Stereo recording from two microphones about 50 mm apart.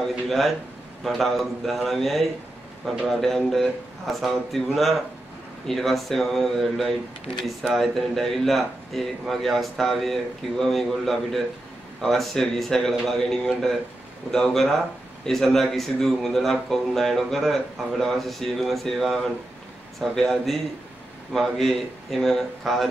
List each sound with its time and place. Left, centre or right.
0.3 s a man's voice: centre